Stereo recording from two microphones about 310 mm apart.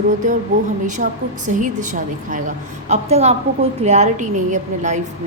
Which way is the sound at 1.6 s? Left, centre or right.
Right.